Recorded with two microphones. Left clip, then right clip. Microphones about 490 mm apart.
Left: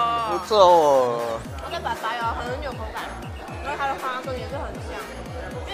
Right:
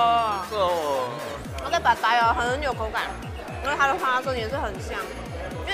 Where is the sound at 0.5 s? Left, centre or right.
Left.